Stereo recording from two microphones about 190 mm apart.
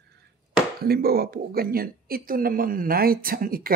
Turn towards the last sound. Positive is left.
turn(degrees=-50)  # may be behind; listen again after turning